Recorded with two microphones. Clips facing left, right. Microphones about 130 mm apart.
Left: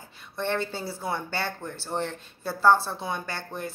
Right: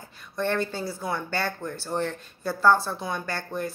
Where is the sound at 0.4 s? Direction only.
20° left (ahead or behind).